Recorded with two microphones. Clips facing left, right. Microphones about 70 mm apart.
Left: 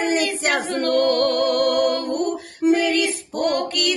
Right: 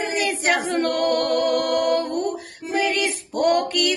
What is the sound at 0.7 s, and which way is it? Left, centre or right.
Music, centre.